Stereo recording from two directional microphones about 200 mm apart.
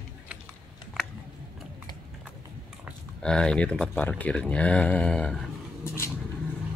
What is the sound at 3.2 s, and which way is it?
Speech, 5° left (ahead or behind).